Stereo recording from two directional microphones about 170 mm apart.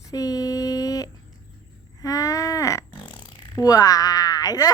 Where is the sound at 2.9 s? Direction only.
30° left (ahead or behind).